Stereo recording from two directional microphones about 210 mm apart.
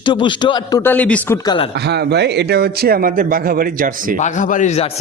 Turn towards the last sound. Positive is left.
turn(degrees=35)  # may be behind; listen again after turning